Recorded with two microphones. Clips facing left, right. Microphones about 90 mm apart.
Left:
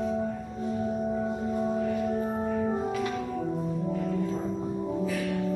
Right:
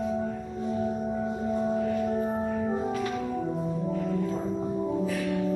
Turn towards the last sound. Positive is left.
turn(degrees=0)  # may be behind; listen again after turning